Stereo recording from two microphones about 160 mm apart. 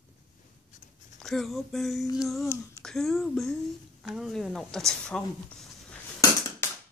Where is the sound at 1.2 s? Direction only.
Centre (ahead or behind).